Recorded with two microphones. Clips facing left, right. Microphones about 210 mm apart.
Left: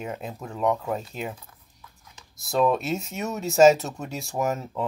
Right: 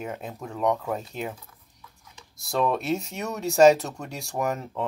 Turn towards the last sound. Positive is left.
turn(degrees=5)  # may be behind; listen again after turning